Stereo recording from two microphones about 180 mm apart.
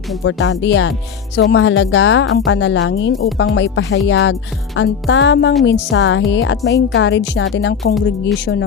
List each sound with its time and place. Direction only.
0.3 s a woman's voice: 90° left; by 8.6 s 75° left (ahead or behind)